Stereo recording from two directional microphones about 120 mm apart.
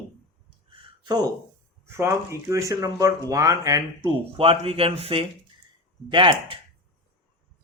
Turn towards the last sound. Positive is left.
turn(degrees=-40)  # may be behind; listen again after turning